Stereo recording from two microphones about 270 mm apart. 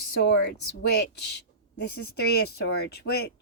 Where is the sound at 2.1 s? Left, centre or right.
Left.